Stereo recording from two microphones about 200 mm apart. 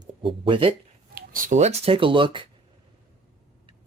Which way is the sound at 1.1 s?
45° right (ahead or behind).